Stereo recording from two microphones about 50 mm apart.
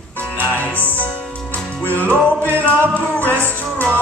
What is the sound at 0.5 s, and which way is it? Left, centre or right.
Music, left.